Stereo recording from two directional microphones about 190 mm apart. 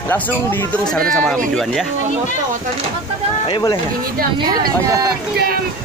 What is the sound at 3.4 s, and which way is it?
Speech, 20° left (ahead or behind).